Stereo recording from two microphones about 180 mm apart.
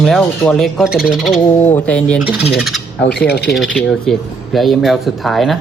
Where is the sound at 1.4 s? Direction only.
10° left (ahead or behind).